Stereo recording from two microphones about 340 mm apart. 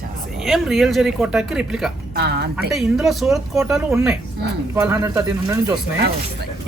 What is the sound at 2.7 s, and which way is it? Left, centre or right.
Speech, centre.